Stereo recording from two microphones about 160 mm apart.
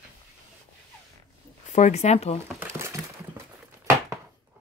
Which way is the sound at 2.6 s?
15° right (ahead or behind).